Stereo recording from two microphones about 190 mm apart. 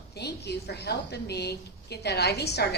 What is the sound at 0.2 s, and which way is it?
A woman's voice, 60° left (ahead or behind).